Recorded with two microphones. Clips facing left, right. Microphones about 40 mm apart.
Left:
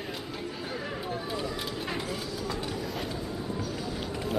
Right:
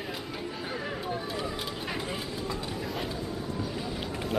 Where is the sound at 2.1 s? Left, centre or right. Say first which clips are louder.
Even; right.